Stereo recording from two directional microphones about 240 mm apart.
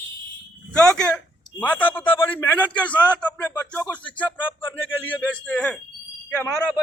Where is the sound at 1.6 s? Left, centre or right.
Centre.